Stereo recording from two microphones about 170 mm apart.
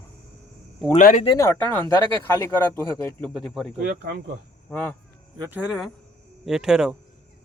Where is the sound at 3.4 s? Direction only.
5° left (ahead or behind).